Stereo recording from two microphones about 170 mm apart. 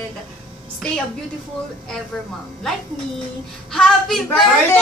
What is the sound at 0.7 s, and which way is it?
Speech, 5° left (ahead or behind).